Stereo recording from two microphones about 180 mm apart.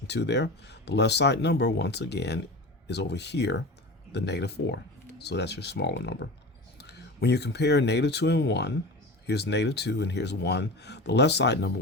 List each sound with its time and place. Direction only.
0.1 s speech: 70° left (ahead or behind)